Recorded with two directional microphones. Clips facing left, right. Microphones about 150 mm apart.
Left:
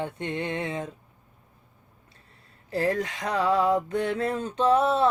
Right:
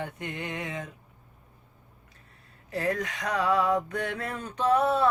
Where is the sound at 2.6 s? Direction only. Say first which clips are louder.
Left 3 dB; 30° left (ahead or behind).